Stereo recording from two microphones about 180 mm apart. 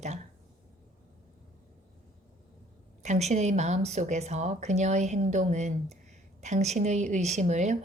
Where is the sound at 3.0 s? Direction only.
40° right (ahead or behind).